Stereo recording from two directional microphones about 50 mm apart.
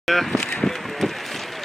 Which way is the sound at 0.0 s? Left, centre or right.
Centre.